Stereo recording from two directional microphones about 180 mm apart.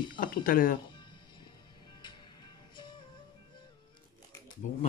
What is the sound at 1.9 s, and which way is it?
Music, 25° left (ahead or behind).